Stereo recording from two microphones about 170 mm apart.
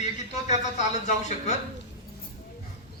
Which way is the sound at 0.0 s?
40° left (ahead or behind).